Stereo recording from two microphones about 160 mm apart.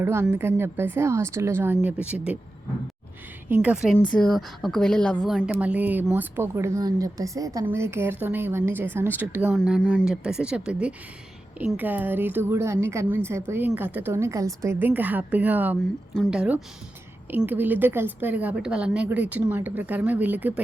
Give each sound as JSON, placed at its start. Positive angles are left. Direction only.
{"t": 0.0, "sound": "a woman's voice", "side_deg": -15}
{"t": 3.5, "sound": "a woman's voice", "side_deg": -10}
{"t": 4.1, "sound": "speech", "side_deg": 5}
{"t": 5.5, "sound": "a woman's voice", "side_deg": -10}
{"t": 16.1, "sound": "speech", "side_deg": 5}
{"t": 16.4, "sound": "a woman's voice", "side_deg": -5}